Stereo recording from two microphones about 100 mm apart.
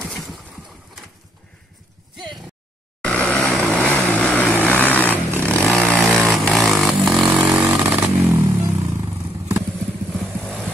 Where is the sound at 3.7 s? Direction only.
15° left (ahead or behind).